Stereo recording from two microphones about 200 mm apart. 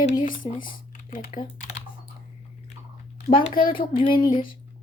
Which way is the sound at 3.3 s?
25° left (ahead or behind).